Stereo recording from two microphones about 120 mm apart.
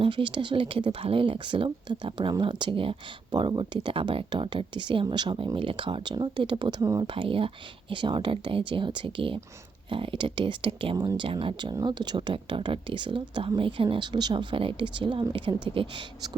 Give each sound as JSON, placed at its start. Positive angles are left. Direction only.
{"t": 0.0, "sound": "speech", "side_deg": -45}
{"t": 7.1, "sound": "speech", "side_deg": -50}
{"t": 10.9, "sound": "speech", "side_deg": -30}
{"t": 11.2, "sound": "speech", "side_deg": -45}
{"t": 11.7, "sound": "speech", "side_deg": -35}